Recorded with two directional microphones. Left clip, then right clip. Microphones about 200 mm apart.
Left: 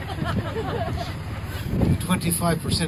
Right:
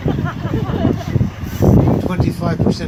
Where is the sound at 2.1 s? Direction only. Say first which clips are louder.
Right 4 dB; 45° left (ahead or behind).